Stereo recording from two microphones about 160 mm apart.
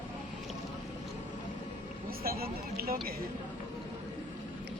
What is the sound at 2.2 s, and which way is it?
Speech, 70° right (ahead or behind).